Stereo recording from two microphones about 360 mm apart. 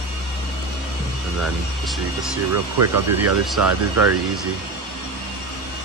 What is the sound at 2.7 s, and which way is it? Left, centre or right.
Speech, right.